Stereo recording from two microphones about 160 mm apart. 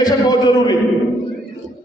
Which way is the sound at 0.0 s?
25° left (ahead or behind).